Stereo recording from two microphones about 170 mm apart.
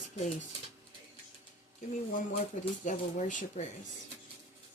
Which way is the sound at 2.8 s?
45° left (ahead or behind).